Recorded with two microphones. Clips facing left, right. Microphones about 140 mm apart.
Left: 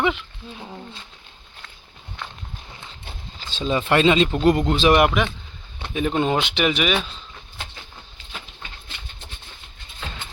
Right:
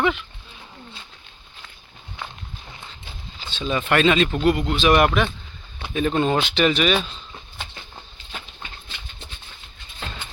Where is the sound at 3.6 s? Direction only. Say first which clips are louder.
Left 1 dB; 25° left (ahead or behind).